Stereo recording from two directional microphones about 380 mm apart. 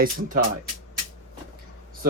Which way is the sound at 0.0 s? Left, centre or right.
Right.